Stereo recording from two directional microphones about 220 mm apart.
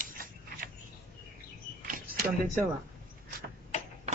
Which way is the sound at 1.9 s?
40° right (ahead or behind).